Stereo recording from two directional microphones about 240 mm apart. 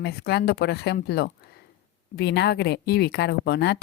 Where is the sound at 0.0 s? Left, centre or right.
Left.